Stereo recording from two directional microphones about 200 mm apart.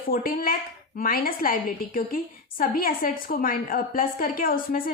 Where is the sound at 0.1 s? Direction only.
45° left (ahead or behind).